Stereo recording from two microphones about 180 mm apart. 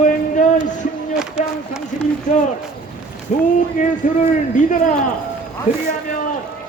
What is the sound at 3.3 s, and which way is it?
A man's voice, 45° left (ahead or behind).